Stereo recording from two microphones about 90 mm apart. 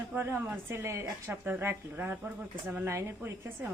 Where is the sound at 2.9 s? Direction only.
30° right (ahead or behind).